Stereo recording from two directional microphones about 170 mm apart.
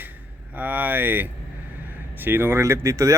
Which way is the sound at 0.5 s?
10° right (ahead or behind).